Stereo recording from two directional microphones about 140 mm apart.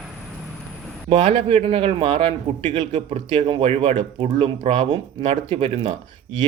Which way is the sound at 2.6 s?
55° right (ahead or behind).